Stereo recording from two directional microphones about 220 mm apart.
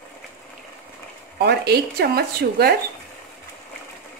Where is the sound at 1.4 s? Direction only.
45° right (ahead or behind).